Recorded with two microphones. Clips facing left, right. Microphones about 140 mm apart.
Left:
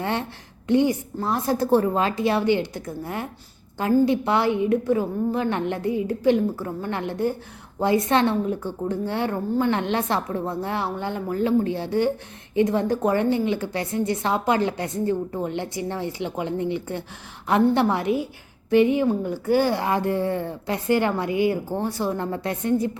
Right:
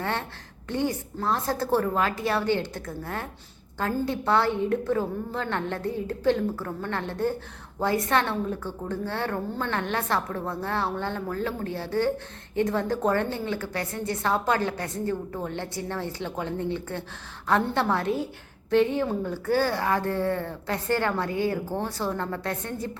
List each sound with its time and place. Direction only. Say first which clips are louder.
0.0 s a woman's voice: left 3 dB; 15° left (ahead or behind)